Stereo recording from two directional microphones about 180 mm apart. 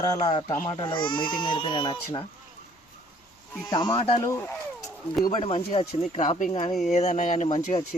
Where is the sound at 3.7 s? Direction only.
25° left (ahead or behind).